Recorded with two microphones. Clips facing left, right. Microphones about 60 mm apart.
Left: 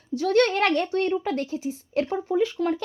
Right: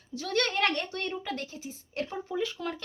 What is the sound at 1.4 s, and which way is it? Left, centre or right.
Speech, left.